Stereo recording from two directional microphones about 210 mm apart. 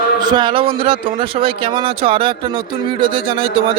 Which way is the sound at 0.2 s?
20° right (ahead or behind).